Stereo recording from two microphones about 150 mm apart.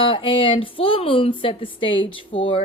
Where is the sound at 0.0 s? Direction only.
35° left (ahead or behind).